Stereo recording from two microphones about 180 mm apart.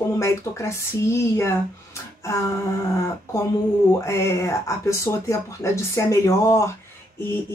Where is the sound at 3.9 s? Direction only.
15° left (ahead or behind).